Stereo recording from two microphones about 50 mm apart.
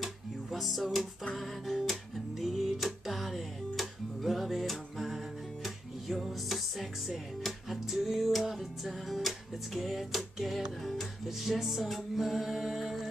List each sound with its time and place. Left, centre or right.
0.0 s music: centre